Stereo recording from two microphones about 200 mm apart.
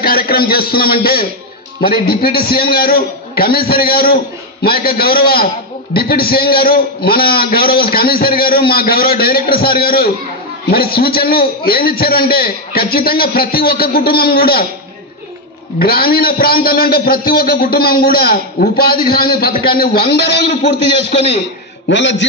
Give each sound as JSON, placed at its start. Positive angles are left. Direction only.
{"t": 0.0, "sound": "a man's voice", "side_deg": 50}
{"t": 15.8, "sound": "a man's voice", "side_deg": 50}
{"t": 21.8, "sound": "a man's voice", "side_deg": 65}